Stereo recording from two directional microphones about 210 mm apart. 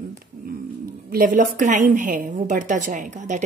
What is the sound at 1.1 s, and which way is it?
Speech, 40° right (ahead or behind).